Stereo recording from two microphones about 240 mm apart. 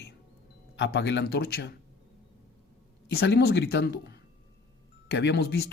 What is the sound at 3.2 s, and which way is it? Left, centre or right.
Speech, left.